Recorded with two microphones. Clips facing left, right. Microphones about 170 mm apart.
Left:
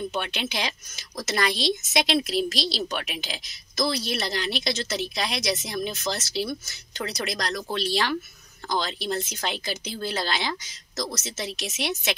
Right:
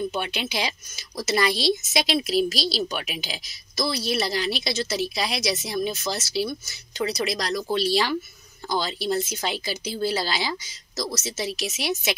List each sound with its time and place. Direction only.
0.1 s speech: 5° right (ahead or behind)